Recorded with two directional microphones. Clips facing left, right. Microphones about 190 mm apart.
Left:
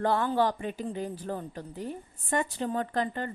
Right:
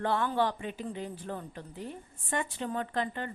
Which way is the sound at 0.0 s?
40° left (ahead or behind).